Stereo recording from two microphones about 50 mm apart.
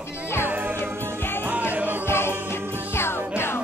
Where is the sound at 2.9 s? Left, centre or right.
Left.